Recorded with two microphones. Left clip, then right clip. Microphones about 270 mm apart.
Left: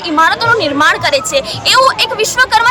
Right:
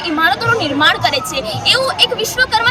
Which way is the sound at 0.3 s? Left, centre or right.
Centre.